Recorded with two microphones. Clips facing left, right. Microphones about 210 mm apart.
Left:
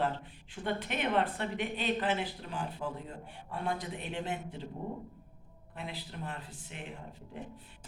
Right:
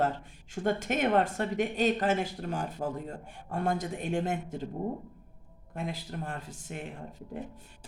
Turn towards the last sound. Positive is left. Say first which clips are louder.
# right 5 dB
turn(degrees=-45)  # may be behind; listen again after turning